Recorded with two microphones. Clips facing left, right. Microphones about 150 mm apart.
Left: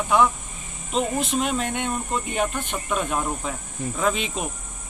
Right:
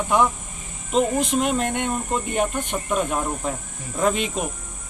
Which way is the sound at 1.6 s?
55° right (ahead or behind).